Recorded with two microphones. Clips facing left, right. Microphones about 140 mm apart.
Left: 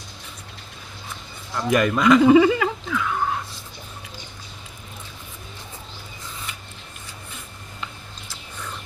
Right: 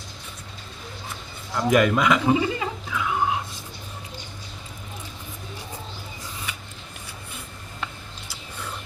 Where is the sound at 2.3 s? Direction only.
90° left.